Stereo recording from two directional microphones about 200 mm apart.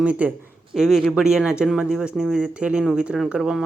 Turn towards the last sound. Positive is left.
turn(degrees=-5)  # may be behind; listen again after turning